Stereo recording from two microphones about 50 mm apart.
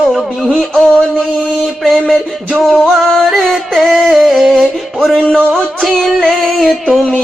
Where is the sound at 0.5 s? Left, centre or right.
Centre.